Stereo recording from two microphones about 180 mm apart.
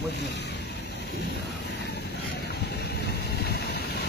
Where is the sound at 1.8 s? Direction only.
65° left (ahead or behind).